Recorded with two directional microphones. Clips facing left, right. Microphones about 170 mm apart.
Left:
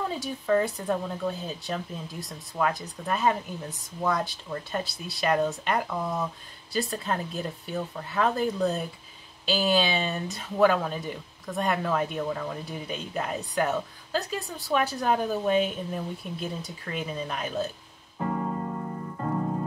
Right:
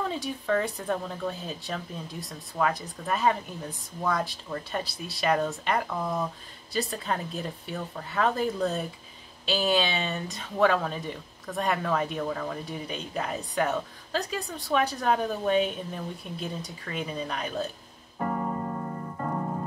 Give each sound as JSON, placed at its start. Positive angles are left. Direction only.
{"t": 0.1, "sound": "speech", "side_deg": 0}